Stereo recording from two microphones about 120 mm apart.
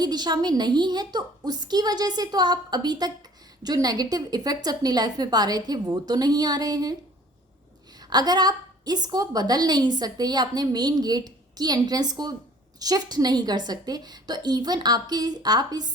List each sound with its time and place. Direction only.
0.0 s a woman's voice: 35° right (ahead or behind)
8.1 s a woman's voice: 35° right (ahead or behind)